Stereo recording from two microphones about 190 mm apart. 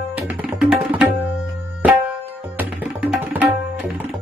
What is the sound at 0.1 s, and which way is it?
Tabla, 5° right (ahead or behind).